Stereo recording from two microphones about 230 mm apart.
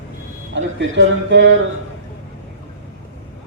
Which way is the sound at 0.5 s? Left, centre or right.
Right.